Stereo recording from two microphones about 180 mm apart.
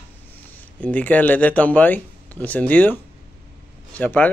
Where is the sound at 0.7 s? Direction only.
10° left (ahead or behind).